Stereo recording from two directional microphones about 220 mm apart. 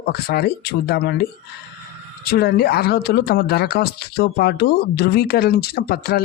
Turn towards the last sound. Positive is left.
turn(degrees=45)  # may be behind; listen again after turning